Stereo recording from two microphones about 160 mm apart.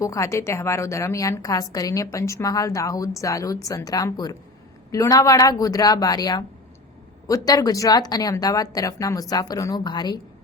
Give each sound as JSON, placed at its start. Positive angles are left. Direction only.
{"t": 0.0, "sound": "a woman's voice", "side_deg": 20}